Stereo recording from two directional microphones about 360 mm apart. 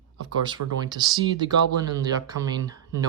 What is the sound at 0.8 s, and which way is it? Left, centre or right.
Speech, centre.